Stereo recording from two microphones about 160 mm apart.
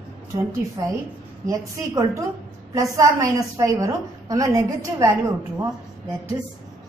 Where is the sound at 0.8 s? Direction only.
20° right (ahead or behind).